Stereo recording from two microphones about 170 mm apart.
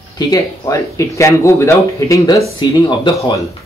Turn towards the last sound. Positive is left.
turn(degrees=25)  # may be behind; listen again after turning